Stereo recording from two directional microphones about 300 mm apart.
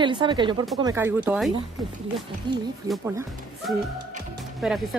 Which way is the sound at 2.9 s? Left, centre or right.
Centre.